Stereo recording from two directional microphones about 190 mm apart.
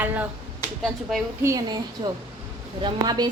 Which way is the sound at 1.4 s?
15° right (ahead or behind).